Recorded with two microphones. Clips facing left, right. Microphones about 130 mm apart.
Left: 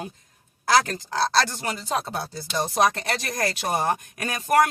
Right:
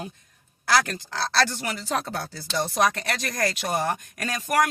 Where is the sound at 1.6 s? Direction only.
25° left (ahead or behind).